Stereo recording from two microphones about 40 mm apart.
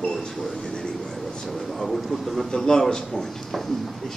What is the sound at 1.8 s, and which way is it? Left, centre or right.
Speech, centre.